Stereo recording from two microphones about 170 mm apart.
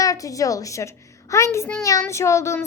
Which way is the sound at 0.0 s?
20° left (ahead or behind).